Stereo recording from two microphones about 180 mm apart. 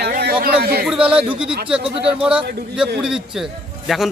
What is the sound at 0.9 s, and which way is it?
Speech, 5° right (ahead or behind).